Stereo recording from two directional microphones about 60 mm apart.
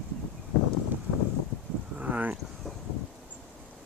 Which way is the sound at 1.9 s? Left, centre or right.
Right.